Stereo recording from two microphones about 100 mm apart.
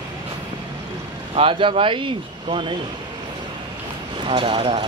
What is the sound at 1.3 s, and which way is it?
Speech, 60° right (ahead or behind).